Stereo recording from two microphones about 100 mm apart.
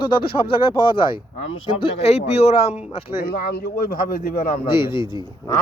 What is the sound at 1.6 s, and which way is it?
Speech, 75° left (ahead or behind).